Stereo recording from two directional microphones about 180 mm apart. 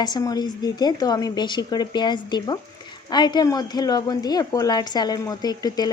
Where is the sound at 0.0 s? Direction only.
20° left (ahead or behind).